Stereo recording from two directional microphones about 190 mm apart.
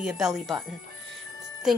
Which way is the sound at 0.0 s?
5° right (ahead or behind).